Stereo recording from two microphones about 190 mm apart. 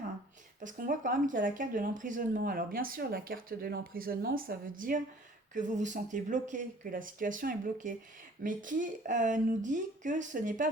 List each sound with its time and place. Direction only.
0.6 s speech: 45° right (ahead or behind)